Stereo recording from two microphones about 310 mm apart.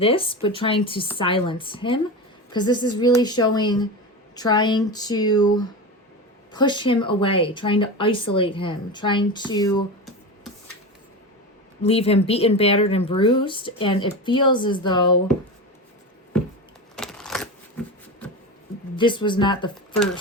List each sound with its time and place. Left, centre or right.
0.0 s speech: centre
11.8 s speech: centre
17.0 s a sound: centre
18.9 s speech: centre